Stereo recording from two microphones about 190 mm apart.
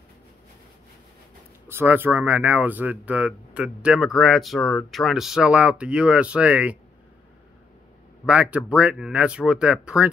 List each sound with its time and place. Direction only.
1.7 s speech: 10° right (ahead or behind)
8.3 s speech: 5° right (ahead or behind)